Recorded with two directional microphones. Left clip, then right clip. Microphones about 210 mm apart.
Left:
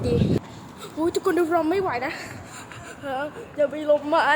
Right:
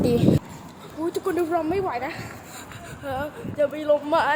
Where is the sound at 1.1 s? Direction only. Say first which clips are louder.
Left 2 dB; 25° left (ahead or behind); by 4.3 s 10° left (ahead or behind).